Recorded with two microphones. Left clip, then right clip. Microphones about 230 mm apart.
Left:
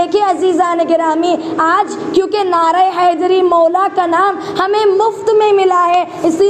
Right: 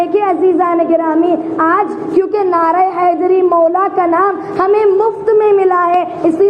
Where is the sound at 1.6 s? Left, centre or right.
Centre.